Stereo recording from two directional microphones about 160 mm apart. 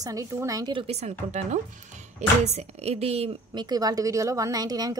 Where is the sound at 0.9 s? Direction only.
45° right (ahead or behind).